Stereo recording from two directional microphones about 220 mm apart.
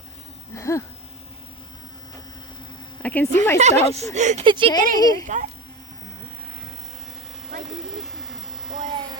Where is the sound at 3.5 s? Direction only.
30° right (ahead or behind).